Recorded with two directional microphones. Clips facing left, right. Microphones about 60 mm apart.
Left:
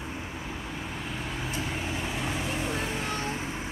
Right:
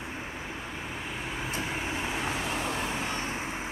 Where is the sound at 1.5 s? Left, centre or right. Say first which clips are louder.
Right 1 dB; centre.